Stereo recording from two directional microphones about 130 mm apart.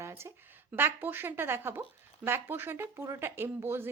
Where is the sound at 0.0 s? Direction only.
20° right (ahead or behind).